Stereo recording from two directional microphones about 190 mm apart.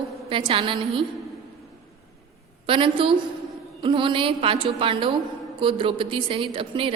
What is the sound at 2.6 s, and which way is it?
A woman's voice, 25° right (ahead or behind).